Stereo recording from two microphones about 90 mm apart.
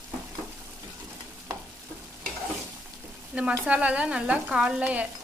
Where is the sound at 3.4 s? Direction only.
15° right (ahead or behind).